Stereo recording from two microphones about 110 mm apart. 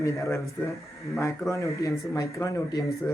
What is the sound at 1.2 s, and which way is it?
A man's voice, 30° left (ahead or behind).